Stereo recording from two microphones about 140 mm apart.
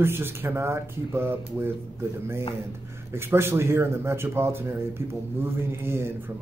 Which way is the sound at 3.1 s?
15° right (ahead or behind).